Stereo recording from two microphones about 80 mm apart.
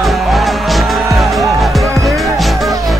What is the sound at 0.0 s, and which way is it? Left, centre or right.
Music, centre.